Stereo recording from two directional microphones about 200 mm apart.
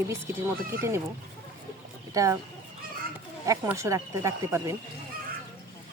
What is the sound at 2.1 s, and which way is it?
Speech, 15° right (ahead or behind).